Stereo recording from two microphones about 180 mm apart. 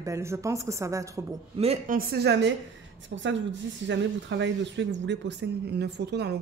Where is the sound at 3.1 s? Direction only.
90° right.